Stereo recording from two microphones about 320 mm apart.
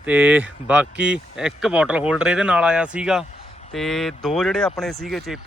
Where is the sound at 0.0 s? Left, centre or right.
Centre.